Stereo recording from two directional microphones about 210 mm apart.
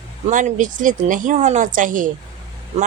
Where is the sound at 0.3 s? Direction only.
35° right (ahead or behind).